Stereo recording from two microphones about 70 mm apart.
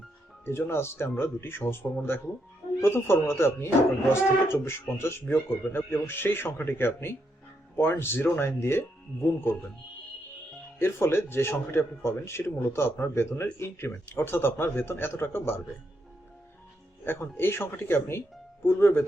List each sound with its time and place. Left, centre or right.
0.4 s speech: left
10.8 s speech: left
17.1 s speech: left